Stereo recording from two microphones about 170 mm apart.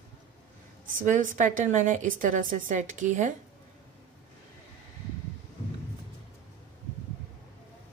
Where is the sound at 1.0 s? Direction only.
50° right (ahead or behind).